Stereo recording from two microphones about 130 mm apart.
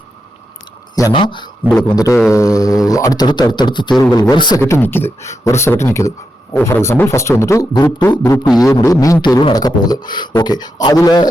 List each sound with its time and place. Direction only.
1.1 s speech: 40° left (ahead or behind)
2.0 s speech: 25° left (ahead or behind)
4.6 s speech: 15° left (ahead or behind)